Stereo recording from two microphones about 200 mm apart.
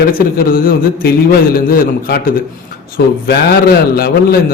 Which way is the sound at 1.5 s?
50° left (ahead or behind).